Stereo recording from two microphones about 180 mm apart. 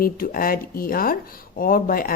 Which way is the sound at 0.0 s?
55° left (ahead or behind).